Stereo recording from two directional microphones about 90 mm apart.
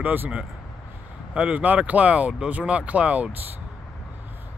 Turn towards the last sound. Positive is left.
turn(degrees=-15)  # may be behind; listen again after turning